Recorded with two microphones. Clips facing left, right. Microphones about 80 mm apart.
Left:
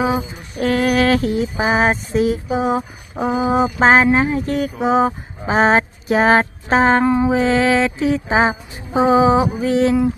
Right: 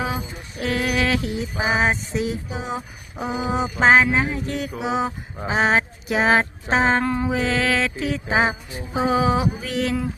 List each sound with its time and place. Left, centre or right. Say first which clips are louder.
0.0 s music: left 8 dB; left
0.6 s a sound: left 7 dB; left
7.0 s music: left 7 dB; centre
7.3 s music: left 6 dB; left